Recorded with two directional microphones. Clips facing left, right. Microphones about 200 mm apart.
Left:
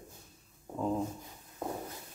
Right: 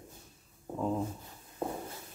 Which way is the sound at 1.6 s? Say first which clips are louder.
Right 2 dB; 30° right (ahead or behind).